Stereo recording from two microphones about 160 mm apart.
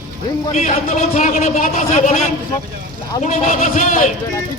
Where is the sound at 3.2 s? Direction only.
50° left (ahead or behind).